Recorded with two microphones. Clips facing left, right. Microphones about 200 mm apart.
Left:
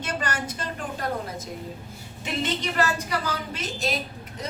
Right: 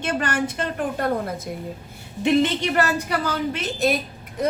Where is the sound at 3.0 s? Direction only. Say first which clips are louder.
Right 5 dB; 60° right (ahead or behind).